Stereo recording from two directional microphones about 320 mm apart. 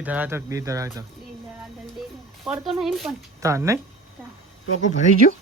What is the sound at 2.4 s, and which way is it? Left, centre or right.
Speech, centre.